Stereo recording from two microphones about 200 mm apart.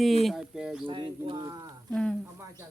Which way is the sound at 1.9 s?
5° left (ahead or behind).